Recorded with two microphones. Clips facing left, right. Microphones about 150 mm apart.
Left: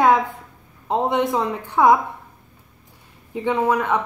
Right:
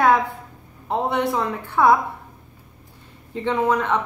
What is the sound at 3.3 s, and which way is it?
Speech, 10° left (ahead or behind).